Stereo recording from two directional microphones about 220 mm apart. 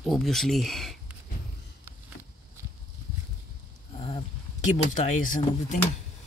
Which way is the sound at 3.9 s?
25° left (ahead or behind).